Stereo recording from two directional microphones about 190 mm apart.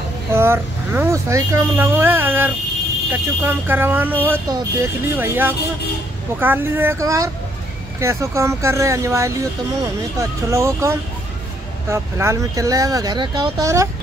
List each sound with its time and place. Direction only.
0.3 s speech: 10° right (ahead or behind)